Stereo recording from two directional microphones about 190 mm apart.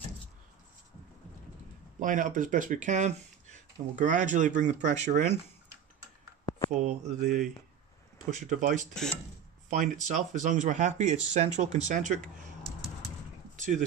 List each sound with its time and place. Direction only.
2.0 s speech: 45° right (ahead or behind)
6.7 s speech: 35° right (ahead or behind)
13.6 s a sound: 40° right (ahead or behind)